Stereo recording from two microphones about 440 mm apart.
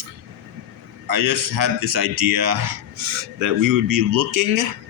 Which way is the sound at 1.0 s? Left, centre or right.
Right.